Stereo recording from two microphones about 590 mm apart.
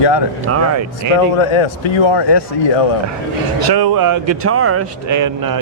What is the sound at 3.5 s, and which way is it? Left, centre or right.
Speech, right.